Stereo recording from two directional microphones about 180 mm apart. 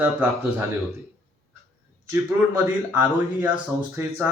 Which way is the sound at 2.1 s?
10° right (ahead or behind).